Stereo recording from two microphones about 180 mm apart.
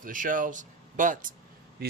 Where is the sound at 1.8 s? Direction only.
60° right (ahead or behind).